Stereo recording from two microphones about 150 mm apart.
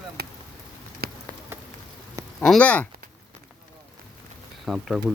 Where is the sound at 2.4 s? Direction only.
5° left (ahead or behind).